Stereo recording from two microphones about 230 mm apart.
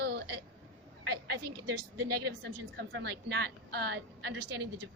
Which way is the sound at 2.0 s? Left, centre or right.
Right.